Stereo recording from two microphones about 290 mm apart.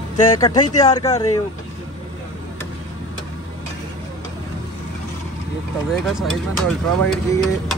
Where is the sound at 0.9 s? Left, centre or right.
Centre.